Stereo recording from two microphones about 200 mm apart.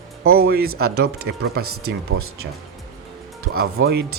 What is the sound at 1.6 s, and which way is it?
Speech, 90° right.